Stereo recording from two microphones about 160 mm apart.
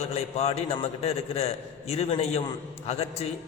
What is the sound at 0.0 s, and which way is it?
A man's voice, 40° left (ahead or behind).